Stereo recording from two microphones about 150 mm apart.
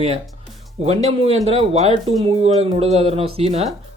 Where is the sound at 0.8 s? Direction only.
45° right (ahead or behind).